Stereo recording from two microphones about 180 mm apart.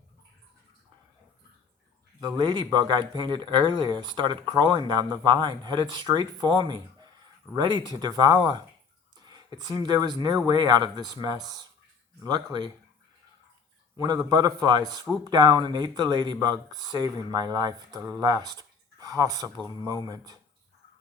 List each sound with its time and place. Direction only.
2.2 s speech: 25° right (ahead or behind)
13.9 s speech: 20° right (ahead or behind)